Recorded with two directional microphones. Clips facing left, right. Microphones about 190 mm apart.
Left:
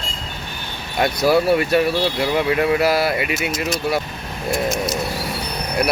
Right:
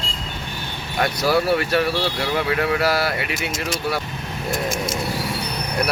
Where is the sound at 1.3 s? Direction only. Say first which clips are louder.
Left 4 dB; 15° left (ahead or behind).